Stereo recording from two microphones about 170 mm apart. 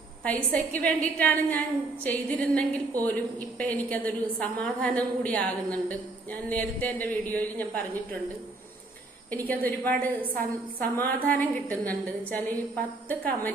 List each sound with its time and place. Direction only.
0.3 s a woman's voice: 10° left (ahead or behind)
9.3 s a woman's voice: 10° left (ahead or behind)